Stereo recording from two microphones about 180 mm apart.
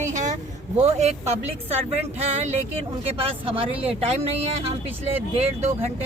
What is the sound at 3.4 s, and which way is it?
Speech, 30° right (ahead or behind).